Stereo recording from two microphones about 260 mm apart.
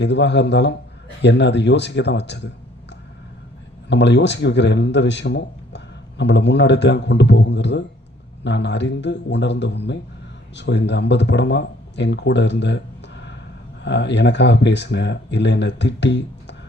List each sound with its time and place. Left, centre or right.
0.0 s speech: left
3.8 s speech: left